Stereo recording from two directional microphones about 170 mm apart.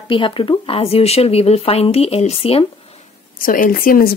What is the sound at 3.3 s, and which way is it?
Speech, 55° left (ahead or behind).